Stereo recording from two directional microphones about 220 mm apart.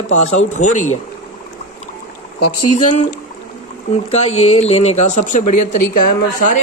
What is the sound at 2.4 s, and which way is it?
Speech, 90° left.